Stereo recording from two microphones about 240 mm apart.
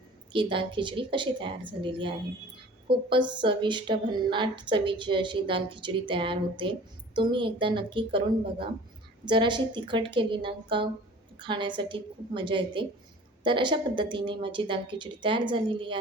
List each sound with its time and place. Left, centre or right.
0.3 s a woman's voice: centre